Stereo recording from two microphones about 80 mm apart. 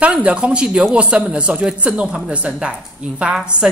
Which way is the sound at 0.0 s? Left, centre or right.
Centre.